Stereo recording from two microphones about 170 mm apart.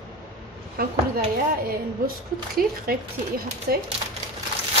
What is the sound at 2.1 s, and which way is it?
A woman's voice, 60° right (ahead or behind).